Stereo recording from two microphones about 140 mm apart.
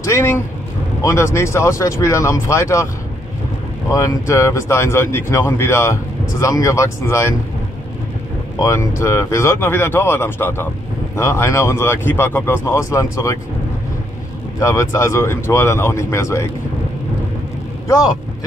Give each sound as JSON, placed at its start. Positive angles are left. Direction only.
{"t": 0.0, "sound": "speech", "side_deg": 20}
{"t": 3.9, "sound": "speech", "side_deg": 25}
{"t": 8.5, "sound": "speech", "side_deg": 20}
{"t": 14.6, "sound": "speech", "side_deg": 25}
{"t": 17.8, "sound": "speech", "side_deg": 25}